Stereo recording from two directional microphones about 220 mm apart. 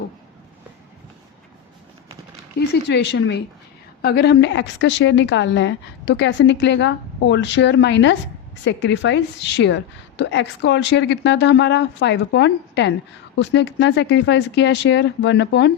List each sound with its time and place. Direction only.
2.6 s a woman's voice: 50° left (ahead or behind)